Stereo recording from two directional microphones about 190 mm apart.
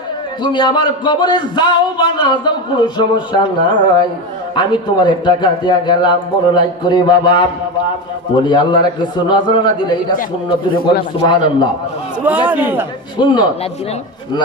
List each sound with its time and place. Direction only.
0.4 s speech: 25° left (ahead or behind)
8.4 s speech: 25° left (ahead or behind)
11.2 s speech: 20° left (ahead or behind)
12.2 s speech: 10° right (ahead or behind)
13.1 s speech: 25° left (ahead or behind)